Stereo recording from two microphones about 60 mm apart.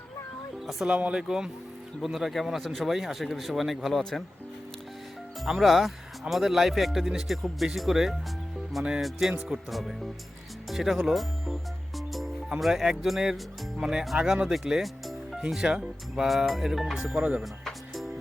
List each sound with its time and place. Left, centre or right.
0.9 s speech: centre
5.4 s speech: centre
11.9 s music: centre
12.5 s speech: centre
17.2 s speech: right
17.4 s music: centre